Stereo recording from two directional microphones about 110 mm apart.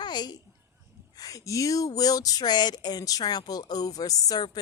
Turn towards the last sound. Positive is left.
turn(degrees=35)  # may be behind; listen again after turning